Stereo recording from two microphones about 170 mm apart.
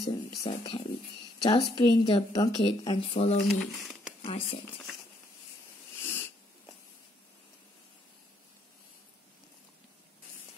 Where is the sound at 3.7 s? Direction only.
Centre (ahead or behind).